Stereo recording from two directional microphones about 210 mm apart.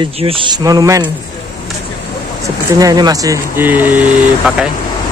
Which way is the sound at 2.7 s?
20° right (ahead or behind).